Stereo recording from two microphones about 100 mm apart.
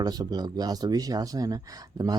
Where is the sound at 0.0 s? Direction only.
40° right (ahead or behind).